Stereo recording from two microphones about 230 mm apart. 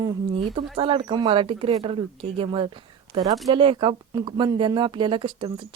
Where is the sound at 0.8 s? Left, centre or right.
Right.